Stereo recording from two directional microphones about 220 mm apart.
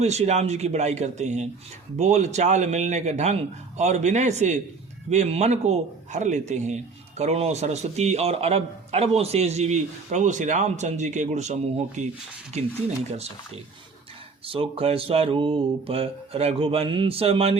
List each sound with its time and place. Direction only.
0.0 s speech: 30° right (ahead or behind)
14.4 s speech: 25° right (ahead or behind)